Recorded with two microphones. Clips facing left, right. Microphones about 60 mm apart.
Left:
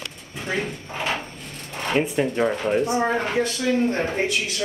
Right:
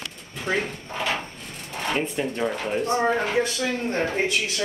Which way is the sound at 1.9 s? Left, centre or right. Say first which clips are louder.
Left 5 dB; centre.